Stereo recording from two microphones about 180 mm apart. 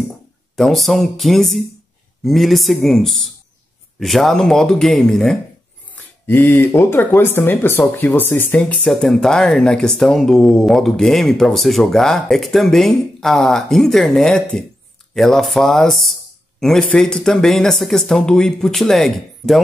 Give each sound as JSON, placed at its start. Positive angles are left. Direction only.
{"t": 0.6, "sound": "speech", "side_deg": 0}
{"t": 6.2, "sound": "speech", "side_deg": 10}